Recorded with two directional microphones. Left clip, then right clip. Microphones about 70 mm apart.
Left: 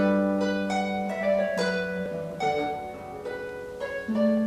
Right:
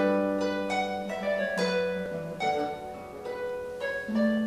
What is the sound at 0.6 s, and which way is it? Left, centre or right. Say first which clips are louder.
Harp: left 2 dB; centre.